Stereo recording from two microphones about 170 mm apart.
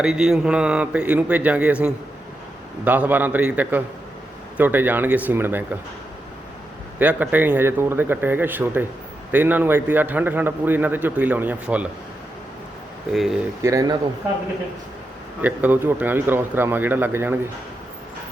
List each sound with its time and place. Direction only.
0.0 s a man's voice: 5° right (ahead or behind)
7.0 s a man's voice: 10° right (ahead or behind)
13.1 s speech: centre (ahead or behind)
13.6 s speech: 20° right (ahead or behind)
15.4 s a man's voice: 10° right (ahead or behind)